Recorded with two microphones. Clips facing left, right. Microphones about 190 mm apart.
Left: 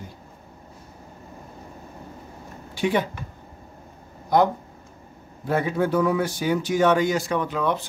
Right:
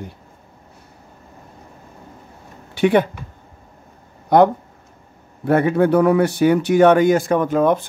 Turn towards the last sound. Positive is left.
turn(degrees=-50)  # may be behind; listen again after turning